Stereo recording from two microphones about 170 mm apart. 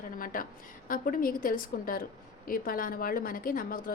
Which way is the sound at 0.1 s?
55° left (ahead or behind).